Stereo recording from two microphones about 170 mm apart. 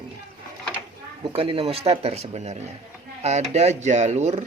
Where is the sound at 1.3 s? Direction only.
35° right (ahead or behind).